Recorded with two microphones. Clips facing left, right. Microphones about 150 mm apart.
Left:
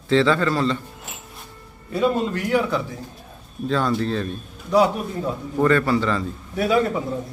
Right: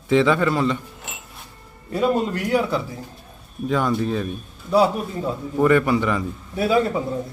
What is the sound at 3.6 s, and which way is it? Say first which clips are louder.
A man's voice: even; 10° right (ahead or behind).